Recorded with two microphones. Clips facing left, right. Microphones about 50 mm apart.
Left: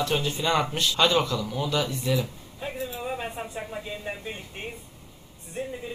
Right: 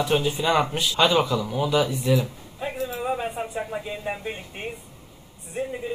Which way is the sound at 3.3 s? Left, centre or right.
Centre.